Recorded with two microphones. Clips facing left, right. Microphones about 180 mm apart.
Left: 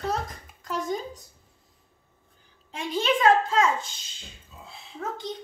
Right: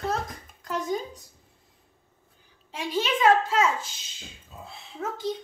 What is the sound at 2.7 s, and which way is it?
A woman's voice, 5° right (ahead or behind).